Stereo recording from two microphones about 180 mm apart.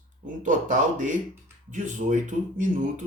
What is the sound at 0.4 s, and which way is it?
Speech, 45° right (ahead or behind).